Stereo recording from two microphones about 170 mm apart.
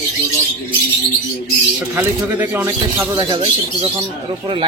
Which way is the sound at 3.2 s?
30° right (ahead or behind).